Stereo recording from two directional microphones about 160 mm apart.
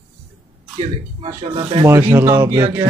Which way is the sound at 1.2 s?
30° right (ahead or behind).